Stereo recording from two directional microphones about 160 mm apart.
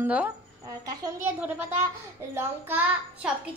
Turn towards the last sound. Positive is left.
turn(degrees=-10)  # may be behind; listen again after turning